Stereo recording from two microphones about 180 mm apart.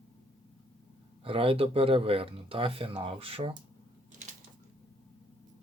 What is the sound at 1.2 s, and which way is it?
Speech, 30° right (ahead or behind).